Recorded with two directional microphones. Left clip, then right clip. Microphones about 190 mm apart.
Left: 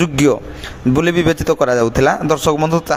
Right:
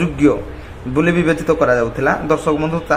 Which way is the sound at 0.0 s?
40° left (ahead or behind).